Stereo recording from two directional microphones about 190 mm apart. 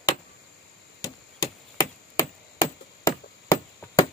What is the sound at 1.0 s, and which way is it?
Chop, 20° left (ahead or behind).